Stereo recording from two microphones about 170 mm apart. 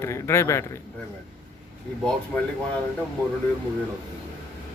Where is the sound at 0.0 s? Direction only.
15° left (ahead or behind).